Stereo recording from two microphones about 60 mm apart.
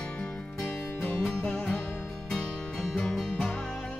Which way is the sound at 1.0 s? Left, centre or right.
Centre.